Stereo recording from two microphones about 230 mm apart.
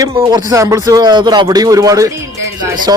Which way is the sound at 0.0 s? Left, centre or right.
Centre.